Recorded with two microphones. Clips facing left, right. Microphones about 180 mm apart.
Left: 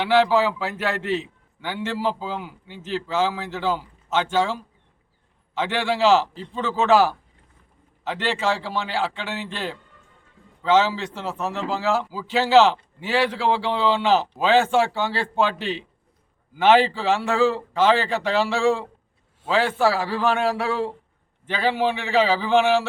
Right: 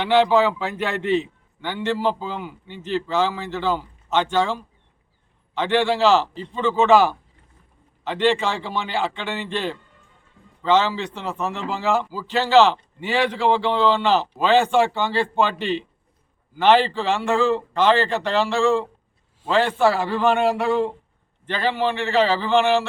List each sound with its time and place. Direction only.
0.0 s a man's voice: 5° left (ahead or behind)
5.5 s a man's voice: 5° left (ahead or behind)